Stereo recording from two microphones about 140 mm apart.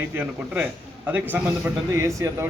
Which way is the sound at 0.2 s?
15° right (ahead or behind).